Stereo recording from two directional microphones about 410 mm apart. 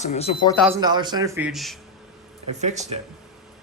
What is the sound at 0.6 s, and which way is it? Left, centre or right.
Speech, centre.